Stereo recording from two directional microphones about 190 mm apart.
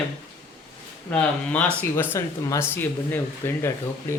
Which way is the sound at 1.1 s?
5° left (ahead or behind).